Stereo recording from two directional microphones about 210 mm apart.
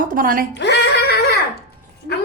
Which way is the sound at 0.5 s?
55° left (ahead or behind).